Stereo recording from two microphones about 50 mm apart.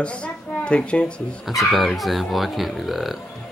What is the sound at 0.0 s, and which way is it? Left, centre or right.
A child's voice, left.